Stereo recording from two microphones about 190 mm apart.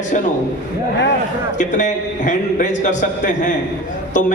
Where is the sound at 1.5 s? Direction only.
40° left (ahead or behind).